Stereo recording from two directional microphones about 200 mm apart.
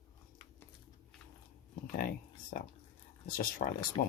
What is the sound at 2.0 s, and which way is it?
Speech, 45° left (ahead or behind).